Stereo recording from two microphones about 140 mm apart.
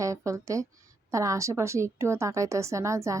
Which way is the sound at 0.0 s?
20° right (ahead or behind).